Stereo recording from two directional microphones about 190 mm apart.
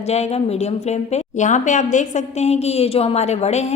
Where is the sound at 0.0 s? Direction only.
35° left (ahead or behind).